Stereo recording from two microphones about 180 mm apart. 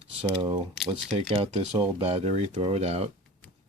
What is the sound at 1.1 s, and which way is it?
Speech, 30° right (ahead or behind).